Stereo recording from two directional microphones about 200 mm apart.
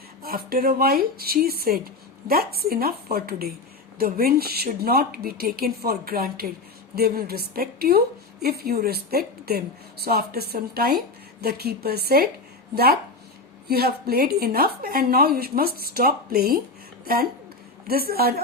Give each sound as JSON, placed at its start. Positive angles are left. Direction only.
{"t": 0.2, "sound": "a woman's voice", "side_deg": -50}
{"t": 17.8, "sound": "a woman's voice", "side_deg": -50}